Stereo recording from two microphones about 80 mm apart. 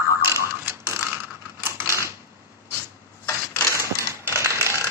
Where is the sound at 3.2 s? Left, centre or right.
Left.